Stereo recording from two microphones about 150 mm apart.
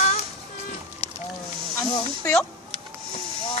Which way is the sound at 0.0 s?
55° left (ahead or behind).